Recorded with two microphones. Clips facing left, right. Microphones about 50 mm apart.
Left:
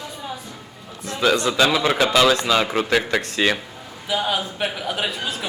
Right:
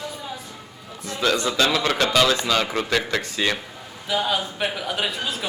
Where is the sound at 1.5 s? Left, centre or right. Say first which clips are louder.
Left 3 dB; centre.